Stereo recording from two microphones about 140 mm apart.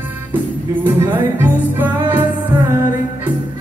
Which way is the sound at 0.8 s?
15° right (ahead or behind).